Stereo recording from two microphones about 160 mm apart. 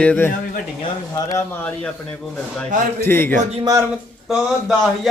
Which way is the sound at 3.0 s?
15° left (ahead or behind).